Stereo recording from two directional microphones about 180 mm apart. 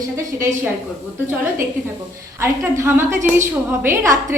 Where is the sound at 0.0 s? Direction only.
15° right (ahead or behind).